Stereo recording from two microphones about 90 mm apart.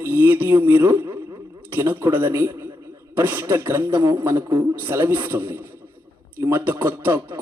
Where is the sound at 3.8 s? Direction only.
60° right (ahead or behind).